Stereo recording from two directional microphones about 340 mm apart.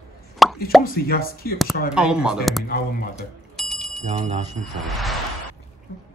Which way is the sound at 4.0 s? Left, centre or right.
Centre.